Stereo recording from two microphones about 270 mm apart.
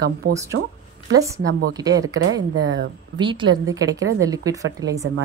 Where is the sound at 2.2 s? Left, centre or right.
Right.